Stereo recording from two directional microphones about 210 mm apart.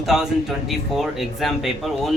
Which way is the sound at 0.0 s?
Centre (ahead or behind).